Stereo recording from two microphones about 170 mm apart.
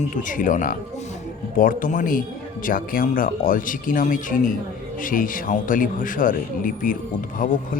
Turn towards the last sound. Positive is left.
turn(degrees=50)  # may be behind; listen again after turning